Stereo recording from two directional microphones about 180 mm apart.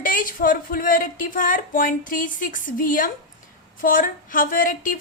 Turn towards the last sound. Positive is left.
turn(degrees=50)  # may be behind; listen again after turning